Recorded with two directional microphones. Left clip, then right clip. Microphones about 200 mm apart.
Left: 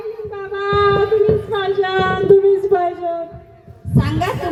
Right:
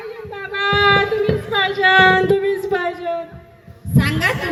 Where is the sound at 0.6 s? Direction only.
50° left (ahead or behind).